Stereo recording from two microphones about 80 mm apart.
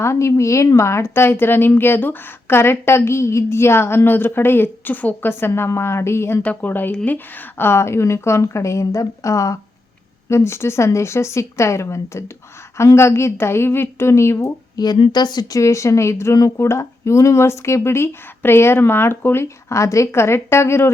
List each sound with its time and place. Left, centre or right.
0.0 s a woman's voice: left
6.4 s a woman's voice: left
14.8 s a woman's voice: left